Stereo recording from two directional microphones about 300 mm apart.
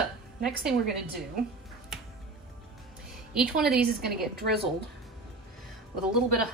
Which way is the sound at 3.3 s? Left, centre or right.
Centre.